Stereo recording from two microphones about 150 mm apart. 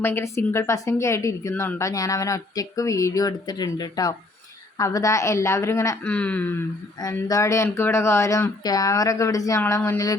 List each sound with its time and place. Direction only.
0.0 s a woman's voice: 15° left (ahead or behind)
6.0 s speech: 10° left (ahead or behind)
7.0 s a woman's voice: 25° left (ahead or behind)